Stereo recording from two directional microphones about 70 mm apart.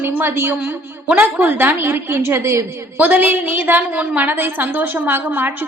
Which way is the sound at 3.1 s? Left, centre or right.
Right.